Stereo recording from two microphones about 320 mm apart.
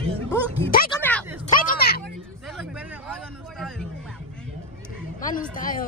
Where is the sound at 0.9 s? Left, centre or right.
Centre.